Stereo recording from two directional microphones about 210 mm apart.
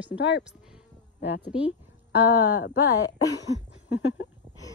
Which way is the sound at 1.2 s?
55° left (ahead or behind).